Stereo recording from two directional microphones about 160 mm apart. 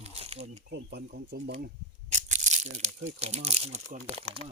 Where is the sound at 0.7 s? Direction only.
90° right.